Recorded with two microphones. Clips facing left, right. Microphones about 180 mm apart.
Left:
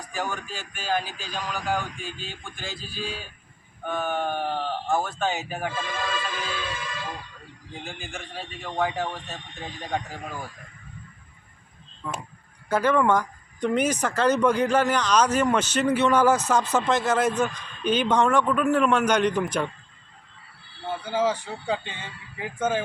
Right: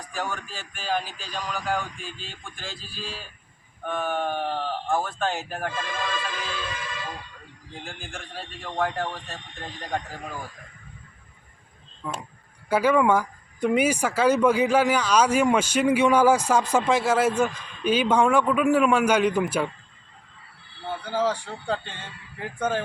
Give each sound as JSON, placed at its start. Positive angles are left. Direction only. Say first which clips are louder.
{"t": 0.1, "sound": "speech", "louder": "left 1 dB", "side_deg": 0}
{"t": 7.7, "sound": "speech", "louder": "left 1 dB", "side_deg": 0}
{"t": 12.0, "sound": "speech", "louder": "even", "side_deg": -10}
{"t": 21.0, "sound": "speech", "louder": "left 1 dB", "side_deg": 10}